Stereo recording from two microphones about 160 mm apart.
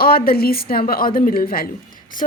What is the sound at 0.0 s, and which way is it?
A woman's voice, 70° left (ahead or behind).